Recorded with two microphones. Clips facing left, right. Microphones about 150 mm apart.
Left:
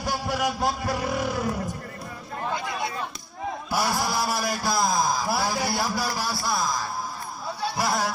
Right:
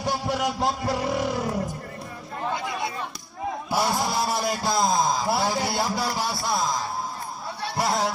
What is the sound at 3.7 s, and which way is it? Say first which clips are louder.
A man's voice: right 1 dB; 25° right (ahead or behind).